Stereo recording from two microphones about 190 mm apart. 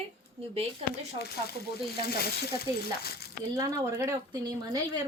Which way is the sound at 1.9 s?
55° left (ahead or behind).